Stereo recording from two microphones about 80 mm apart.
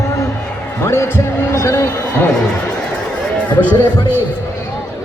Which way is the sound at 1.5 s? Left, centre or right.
Left.